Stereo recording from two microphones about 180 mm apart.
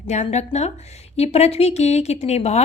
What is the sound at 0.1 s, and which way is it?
A woman's voice, 40° left (ahead or behind).